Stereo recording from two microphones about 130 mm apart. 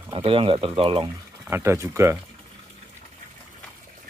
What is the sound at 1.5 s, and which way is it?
Speech, 20° right (ahead or behind).